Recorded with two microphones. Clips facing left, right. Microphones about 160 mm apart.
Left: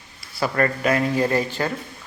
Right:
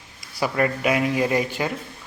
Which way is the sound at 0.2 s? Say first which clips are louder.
Left 1 dB; 15° right (ahead or behind).